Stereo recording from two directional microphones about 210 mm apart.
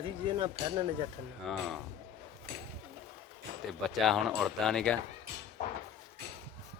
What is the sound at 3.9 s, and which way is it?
Speech, centre (ahead or behind).